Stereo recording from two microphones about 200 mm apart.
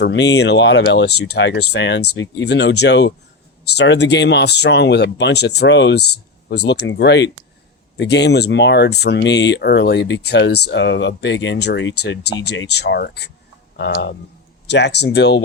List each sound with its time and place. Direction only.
0.0 s speech: 60° left (ahead or behind)